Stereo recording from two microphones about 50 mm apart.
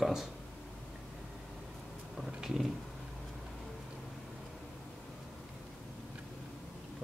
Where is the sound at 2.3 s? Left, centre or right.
Centre.